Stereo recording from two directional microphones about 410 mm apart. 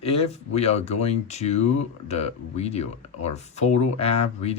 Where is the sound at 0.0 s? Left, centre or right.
Centre.